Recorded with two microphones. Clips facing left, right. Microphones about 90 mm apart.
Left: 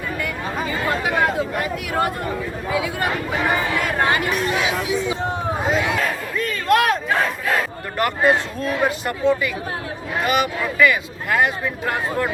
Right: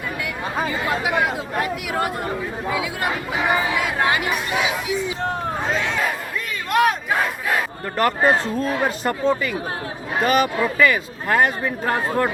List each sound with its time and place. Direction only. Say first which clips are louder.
0.7 s speech: left 2 dB; 5° right (ahead or behind)
6.0 s battle cry: left 1 dB; 5° right (ahead or behind)
7.9 s speech: even; 35° right (ahead or behind)